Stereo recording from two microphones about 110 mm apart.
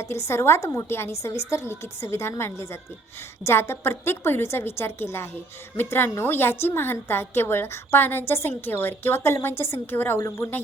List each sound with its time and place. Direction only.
0.3 s a woman's voice: 25° left (ahead or behind)